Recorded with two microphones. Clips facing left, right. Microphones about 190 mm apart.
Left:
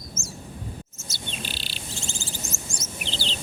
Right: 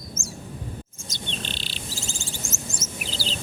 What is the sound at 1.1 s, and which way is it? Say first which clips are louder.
Bird: right 1 dB; 10° left (ahead or behind).